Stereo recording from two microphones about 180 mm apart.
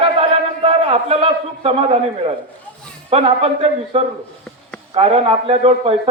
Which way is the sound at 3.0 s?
35° right (ahead or behind).